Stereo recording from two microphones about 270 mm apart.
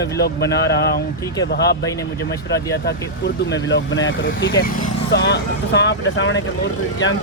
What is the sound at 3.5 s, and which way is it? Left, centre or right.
Speech, left.